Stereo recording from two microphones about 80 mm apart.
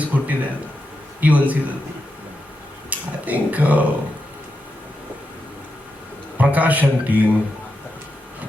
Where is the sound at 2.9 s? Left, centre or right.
Centre.